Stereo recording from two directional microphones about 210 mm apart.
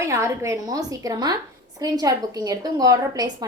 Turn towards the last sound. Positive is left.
turn(degrees=-20)  # may be behind; listen again after turning